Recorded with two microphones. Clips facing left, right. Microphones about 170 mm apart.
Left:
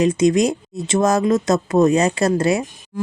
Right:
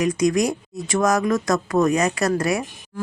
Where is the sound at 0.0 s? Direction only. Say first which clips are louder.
Left 4 dB; 25° left (ahead or behind).